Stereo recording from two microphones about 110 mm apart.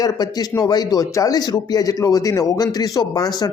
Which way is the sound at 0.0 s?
35° left (ahead or behind).